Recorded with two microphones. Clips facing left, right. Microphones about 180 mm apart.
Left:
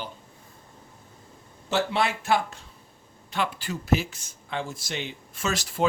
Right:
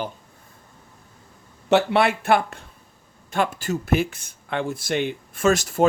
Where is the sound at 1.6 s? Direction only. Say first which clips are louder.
Right 7 dB; 65° right (ahead or behind).